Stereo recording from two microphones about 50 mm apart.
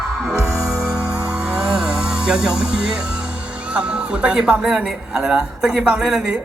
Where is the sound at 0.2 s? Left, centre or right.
Centre.